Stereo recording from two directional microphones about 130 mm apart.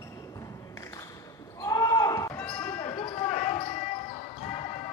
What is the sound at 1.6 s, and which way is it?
Basketball bounce, 25° left (ahead or behind).